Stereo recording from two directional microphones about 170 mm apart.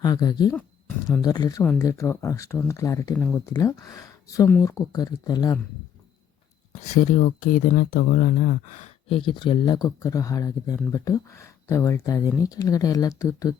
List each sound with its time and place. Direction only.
0.0 s speech: 20° left (ahead or behind)
3.2 s speech: 5° left (ahead or behind)
3.5 s speech: 20° left (ahead or behind)
6.7 s speech: 45° left (ahead or behind)
9.0 s speech: 30° left (ahead or behind)